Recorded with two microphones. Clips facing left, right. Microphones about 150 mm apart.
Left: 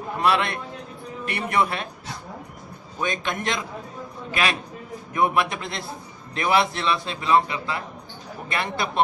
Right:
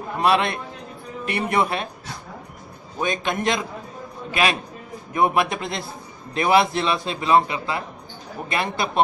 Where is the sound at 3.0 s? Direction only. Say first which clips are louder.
Right 3 dB; 15° right (ahead or behind).